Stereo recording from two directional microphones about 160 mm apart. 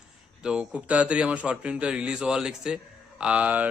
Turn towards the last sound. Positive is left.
turn(degrees=-10)  # may be behind; listen again after turning